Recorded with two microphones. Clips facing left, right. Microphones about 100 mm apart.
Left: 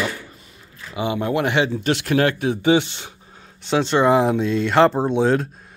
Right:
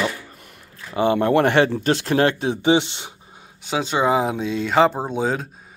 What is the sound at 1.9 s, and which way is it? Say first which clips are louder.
Speech: right 1 dB; 35° right (ahead or behind).